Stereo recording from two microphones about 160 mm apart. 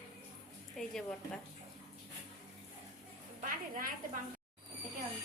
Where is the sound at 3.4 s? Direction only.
60° right (ahead or behind).